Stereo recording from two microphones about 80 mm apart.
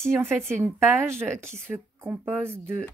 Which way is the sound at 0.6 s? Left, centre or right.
Right.